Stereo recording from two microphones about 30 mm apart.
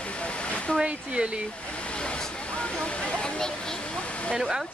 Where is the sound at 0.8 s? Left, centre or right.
Right.